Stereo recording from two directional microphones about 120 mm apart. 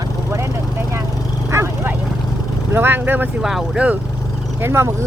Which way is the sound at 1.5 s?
20° right (ahead or behind).